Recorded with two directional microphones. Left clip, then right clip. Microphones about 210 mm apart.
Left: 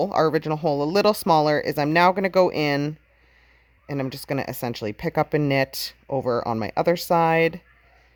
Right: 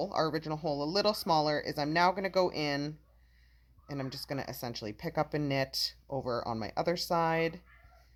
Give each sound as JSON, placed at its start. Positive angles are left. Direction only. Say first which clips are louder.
{"t": 0.0, "sound": "speech", "louder": "left 11 dB", "side_deg": 50}